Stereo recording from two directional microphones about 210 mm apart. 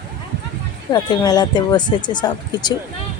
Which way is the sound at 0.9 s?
20° left (ahead or behind).